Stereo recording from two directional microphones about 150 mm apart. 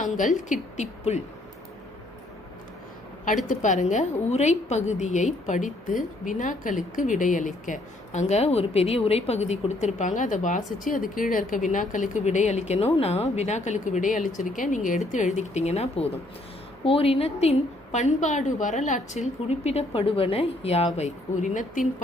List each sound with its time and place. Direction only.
0.0 s a woman's voice: 60° left (ahead or behind)
3.4 s a woman's voice: 55° left (ahead or behind)